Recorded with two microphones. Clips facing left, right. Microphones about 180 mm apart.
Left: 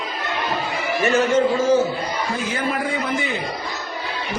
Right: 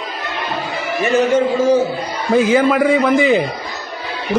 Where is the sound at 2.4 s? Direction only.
90° right.